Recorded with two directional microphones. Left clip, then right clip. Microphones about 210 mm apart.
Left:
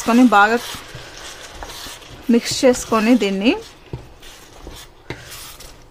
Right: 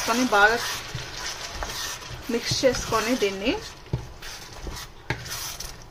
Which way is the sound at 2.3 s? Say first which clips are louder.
Left 8 dB; 55° left (ahead or behind).